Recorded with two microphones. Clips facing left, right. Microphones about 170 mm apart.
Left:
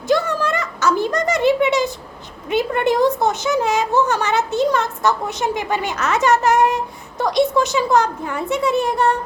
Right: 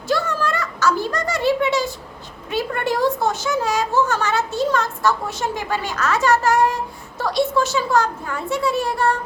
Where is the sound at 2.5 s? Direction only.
20° left (ahead or behind).